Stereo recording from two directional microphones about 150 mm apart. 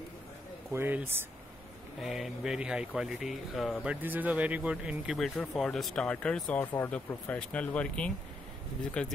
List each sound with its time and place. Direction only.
0.7 s speech: 15° right (ahead or behind)
2.0 s speech: centre (ahead or behind)